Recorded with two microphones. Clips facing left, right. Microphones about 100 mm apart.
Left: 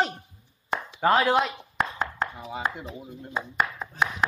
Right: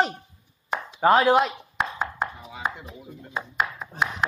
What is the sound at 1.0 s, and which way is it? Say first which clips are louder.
Speech: right 3 dB; 15° right (ahead or behind).